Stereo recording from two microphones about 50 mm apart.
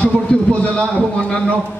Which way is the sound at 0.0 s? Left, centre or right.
Left.